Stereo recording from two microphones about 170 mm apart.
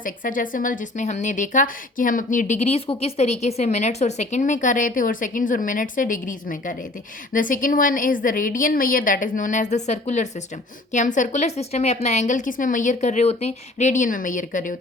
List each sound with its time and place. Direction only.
0.0 s speech: 55° left (ahead or behind)